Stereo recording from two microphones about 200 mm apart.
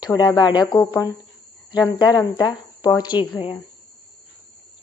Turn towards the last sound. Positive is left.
turn(degrees=25)  # may be behind; listen again after turning